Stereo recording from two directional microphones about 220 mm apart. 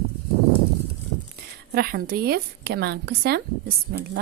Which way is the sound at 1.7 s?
45° right (ahead or behind).